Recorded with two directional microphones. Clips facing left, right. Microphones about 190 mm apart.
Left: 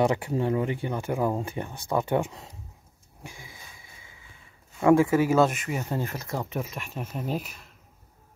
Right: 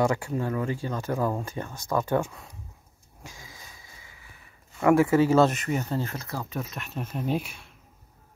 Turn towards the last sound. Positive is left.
turn(degrees=5)  # may be behind; listen again after turning